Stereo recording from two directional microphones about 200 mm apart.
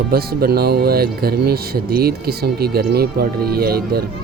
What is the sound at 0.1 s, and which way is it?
Speech, 50° right (ahead or behind).